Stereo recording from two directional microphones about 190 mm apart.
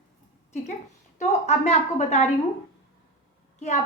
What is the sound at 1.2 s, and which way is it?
Speech, 35° left (ahead or behind).